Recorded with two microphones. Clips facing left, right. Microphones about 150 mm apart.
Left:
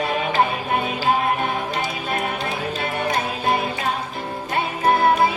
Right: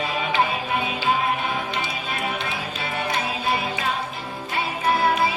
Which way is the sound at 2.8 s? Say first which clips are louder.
Left 2 dB; 50° left (ahead or behind).